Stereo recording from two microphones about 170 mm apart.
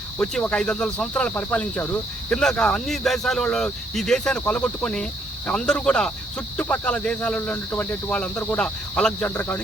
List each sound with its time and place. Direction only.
0.2 s speech: 5° left (ahead or behind)